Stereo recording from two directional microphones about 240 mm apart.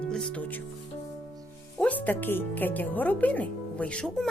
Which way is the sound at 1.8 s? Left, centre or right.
Centre.